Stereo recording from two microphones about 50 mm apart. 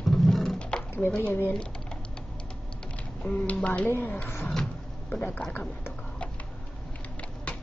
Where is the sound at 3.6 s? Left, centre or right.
Left.